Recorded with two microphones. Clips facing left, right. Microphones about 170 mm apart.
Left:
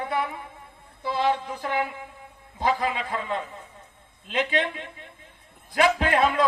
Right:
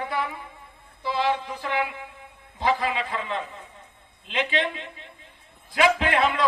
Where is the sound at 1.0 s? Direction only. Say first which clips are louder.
Left 1 dB; 50° left (ahead or behind).